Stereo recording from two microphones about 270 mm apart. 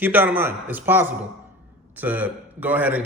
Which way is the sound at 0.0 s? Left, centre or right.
Centre.